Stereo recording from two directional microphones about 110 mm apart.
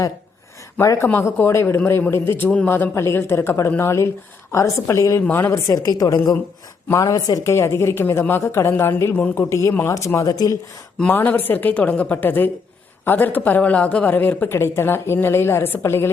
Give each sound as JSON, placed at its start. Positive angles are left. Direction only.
{"t": 0.8, "sound": "speech", "side_deg": 25}
{"t": 6.9, "sound": "speech", "side_deg": 35}
{"t": 10.9, "sound": "a woman's voice", "side_deg": 15}